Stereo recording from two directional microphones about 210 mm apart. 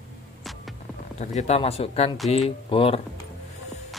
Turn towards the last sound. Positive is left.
turn(degrees=25)  # may be behind; listen again after turning